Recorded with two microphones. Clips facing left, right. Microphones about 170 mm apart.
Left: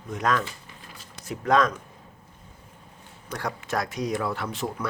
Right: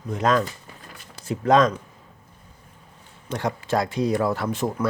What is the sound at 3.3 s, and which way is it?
Speech, 25° right (ahead or behind).